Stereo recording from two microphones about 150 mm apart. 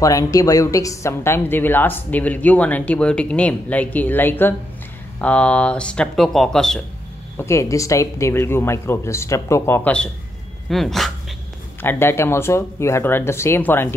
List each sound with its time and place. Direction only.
0.0 s a woman's voice: 25° left (ahead or behind); by 6.8 s 5° left (ahead or behind)
7.3 s speech: 20° left (ahead or behind)
10.7 s speech: centre (ahead or behind)
11.8 s a woman's voice: 15° left (ahead or behind)